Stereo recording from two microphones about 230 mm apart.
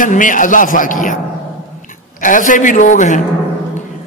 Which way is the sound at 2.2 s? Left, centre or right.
Left.